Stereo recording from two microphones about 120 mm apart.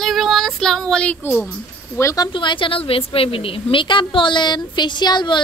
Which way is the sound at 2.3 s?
45° left (ahead or behind).